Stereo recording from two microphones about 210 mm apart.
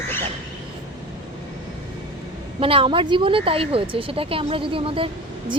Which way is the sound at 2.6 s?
25° right (ahead or behind).